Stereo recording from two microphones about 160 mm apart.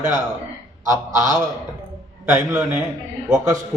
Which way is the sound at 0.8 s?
20° right (ahead or behind).